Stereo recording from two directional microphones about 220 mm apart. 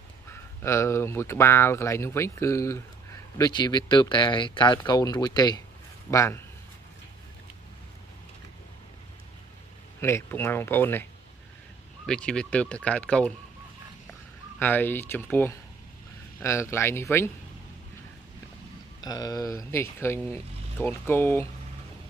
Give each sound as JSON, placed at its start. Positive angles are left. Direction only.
{"t": 0.3, "sound": "speech", "side_deg": 10}
{"t": 9.9, "sound": "speech", "side_deg": 10}
{"t": 12.1, "sound": "speech", "side_deg": 5}
{"t": 14.6, "sound": "speech", "side_deg": 10}
{"t": 18.9, "sound": "speech", "side_deg": 15}